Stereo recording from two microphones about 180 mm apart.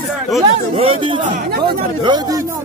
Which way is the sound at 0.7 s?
30° right (ahead or behind).